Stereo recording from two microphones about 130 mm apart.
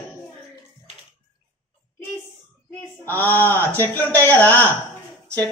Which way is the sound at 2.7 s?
15° left (ahead or behind).